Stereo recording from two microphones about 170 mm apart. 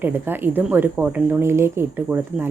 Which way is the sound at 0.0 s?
10° right (ahead or behind).